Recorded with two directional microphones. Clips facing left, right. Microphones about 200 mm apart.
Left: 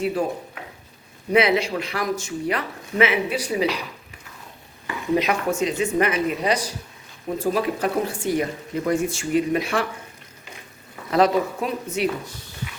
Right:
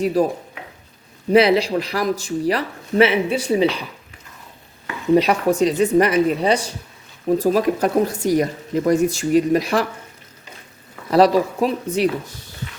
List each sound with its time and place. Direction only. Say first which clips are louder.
0.0 s speech: right 5 dB; 35° right (ahead or behind)
1.3 s speech: right 5 dB; 35° right (ahead or behind)
5.1 s speech: right 6 dB; 35° right (ahead or behind)
7.3 s speech: right 5 dB; 40° right (ahead or behind)
11.1 s speech: right 4 dB; 35° right (ahead or behind)